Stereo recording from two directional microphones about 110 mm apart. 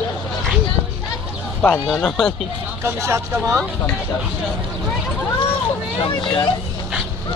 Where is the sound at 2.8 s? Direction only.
25° right (ahead or behind).